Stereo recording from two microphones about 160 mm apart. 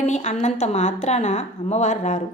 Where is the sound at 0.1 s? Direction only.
45° left (ahead or behind).